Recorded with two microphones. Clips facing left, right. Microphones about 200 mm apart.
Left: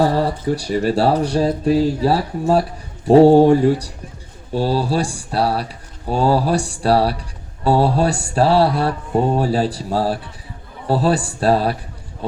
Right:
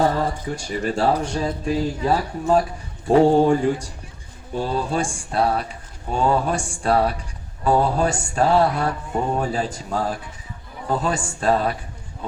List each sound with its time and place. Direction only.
0.0 s speech: 35° left (ahead or behind)
4.5 s speech: 35° left (ahead or behind)